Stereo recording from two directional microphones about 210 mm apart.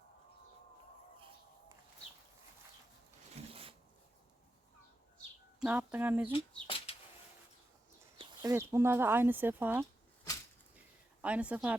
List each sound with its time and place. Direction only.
3.5 s a sound: 25° right (ahead or behind)
5.1 s bird: 5° right (ahead or behind)
6.7 s bird: 25° left (ahead or behind)
8.2 s speech: 15° right (ahead or behind)
11.2 s speech: 5° right (ahead or behind)